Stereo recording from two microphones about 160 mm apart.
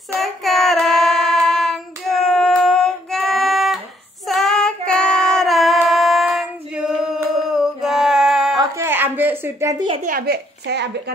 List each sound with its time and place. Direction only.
0.1 s child singing: centre (ahead or behind)
8.5 s a sound: 15° right (ahead or behind)
10.0 s a woman's voice: 70° right (ahead or behind); by 11.1 s 90° right